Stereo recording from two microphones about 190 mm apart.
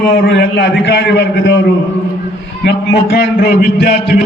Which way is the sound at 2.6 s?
60° left (ahead or behind).